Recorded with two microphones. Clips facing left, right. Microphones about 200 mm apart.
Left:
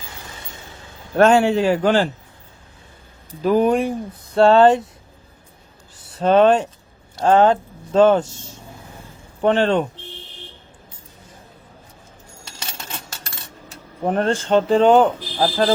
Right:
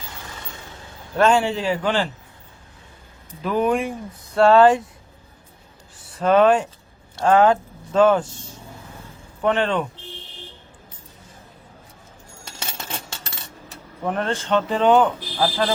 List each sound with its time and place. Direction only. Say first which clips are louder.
1.1 s a man's voice: left 4 dB; 50° left (ahead or behind)
3.4 s speech: left 4 dB; 35° left (ahead or behind)
6.1 s speech: left 2 dB; 30° left (ahead or behind)
9.4 s speech: left 4 dB; 30° left (ahead or behind)
14.0 s speech: left 5 dB; 35° left (ahead or behind)
14.7 s speech: left 3 dB; 35° left (ahead or behind)